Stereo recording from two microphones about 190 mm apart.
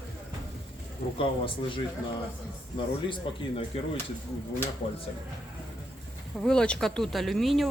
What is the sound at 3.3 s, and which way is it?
Speech, 30° left (ahead or behind).